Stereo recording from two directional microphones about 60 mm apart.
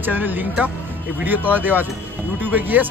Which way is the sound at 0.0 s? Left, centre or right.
Right.